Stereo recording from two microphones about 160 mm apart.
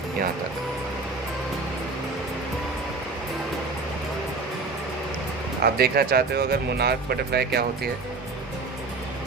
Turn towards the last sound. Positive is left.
turn(degrees=-80)